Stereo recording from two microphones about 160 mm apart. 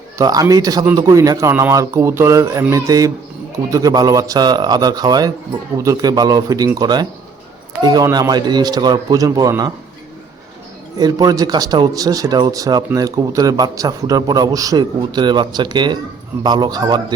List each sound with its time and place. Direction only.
0.2 s speech: 20° right (ahead or behind)
10.9 s speech: 25° right (ahead or behind)